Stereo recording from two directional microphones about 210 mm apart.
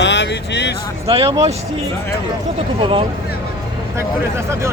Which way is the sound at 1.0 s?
25° right (ahead or behind).